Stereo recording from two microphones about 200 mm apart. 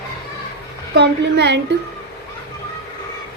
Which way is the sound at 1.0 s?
60° right (ahead or behind).